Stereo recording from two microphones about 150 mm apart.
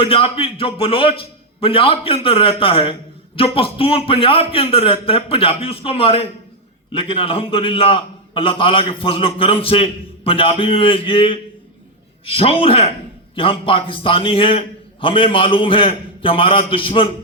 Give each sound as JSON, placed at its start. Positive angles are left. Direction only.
{"t": 0.0, "sound": "a man's voice", "side_deg": 40}